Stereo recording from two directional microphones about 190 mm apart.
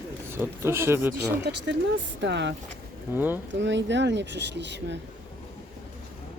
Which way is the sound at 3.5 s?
70° right (ahead or behind).